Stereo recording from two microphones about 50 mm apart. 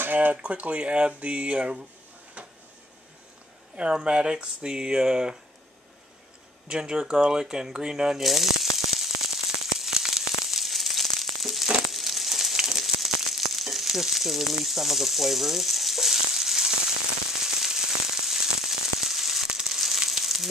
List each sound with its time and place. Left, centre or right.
0.0 s speech: right
0.4 s speech: right
3.7 s speech: right
6.7 s speech: centre
9.7 s sizzle: centre
17.6 s frying: centre